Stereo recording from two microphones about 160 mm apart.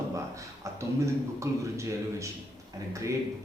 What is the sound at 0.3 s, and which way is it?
A man's voice, 20° right (ahead or behind).